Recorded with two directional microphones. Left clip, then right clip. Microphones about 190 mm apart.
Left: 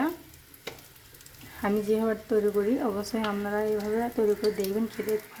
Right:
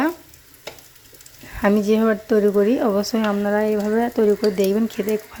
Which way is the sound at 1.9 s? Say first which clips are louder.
Right 8 dB; 35° right (ahead or behind).